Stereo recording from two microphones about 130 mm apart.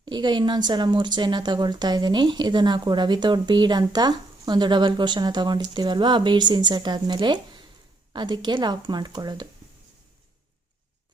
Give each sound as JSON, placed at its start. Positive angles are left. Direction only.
{"t": 0.0, "sound": "speech", "side_deg": -35}